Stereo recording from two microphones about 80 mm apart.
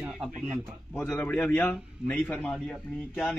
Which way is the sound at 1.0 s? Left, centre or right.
Left.